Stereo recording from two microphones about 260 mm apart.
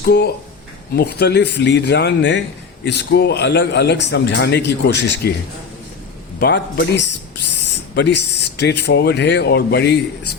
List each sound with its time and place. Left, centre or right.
0.0 s a man's voice: left
6.4 s a man's voice: left